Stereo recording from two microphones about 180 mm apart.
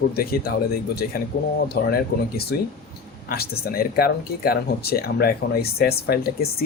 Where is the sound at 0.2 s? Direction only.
55° left (ahead or behind).